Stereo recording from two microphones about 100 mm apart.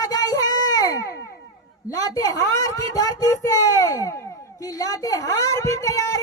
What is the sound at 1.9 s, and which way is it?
Speech, 35° left (ahead or behind).